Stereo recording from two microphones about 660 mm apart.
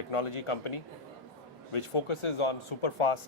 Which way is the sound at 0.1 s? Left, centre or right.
Left.